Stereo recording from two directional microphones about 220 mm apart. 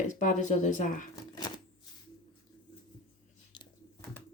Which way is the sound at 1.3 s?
20° left (ahead or behind).